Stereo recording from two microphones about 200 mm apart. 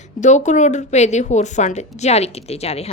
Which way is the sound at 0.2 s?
35° left (ahead or behind).